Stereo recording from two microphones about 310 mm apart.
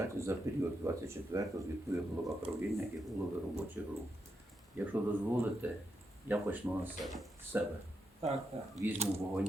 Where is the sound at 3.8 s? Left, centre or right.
Centre.